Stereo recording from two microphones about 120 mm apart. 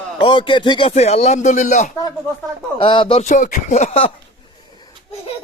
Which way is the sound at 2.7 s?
45° left (ahead or behind).